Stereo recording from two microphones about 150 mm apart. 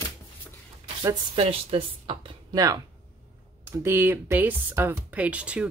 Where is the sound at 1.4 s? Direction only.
40° right (ahead or behind).